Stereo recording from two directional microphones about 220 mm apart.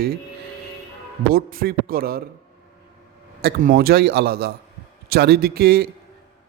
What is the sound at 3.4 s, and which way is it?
A man's voice, 40° right (ahead or behind).